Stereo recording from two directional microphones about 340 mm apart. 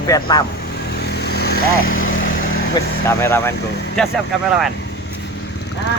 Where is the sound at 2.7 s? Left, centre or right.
Centre.